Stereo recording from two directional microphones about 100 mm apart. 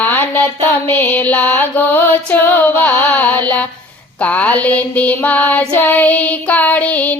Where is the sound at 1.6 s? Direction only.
20° left (ahead or behind).